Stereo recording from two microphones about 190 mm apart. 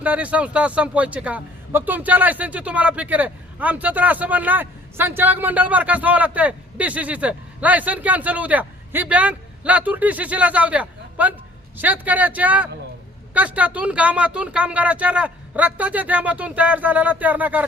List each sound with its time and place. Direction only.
0.0 s a man's voice: 5° right (ahead or behind)